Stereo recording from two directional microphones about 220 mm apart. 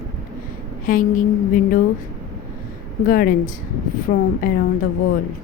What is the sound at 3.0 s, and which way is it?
Speech, 40° left (ahead or behind).